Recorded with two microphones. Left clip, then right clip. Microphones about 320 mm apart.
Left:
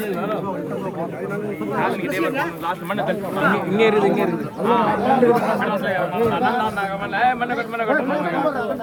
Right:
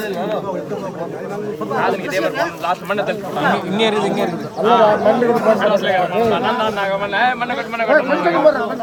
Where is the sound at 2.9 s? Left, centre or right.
Right.